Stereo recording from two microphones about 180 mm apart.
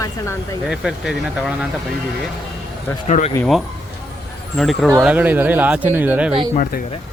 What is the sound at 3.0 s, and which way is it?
Speech, 40° left (ahead or behind).